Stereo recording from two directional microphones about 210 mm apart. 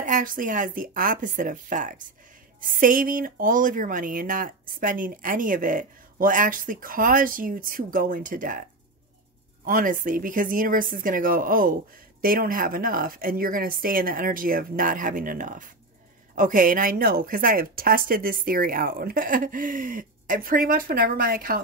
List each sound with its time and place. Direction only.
0.0 s speech: 40° right (ahead or behind)
9.7 s a woman's voice: 40° right (ahead or behind)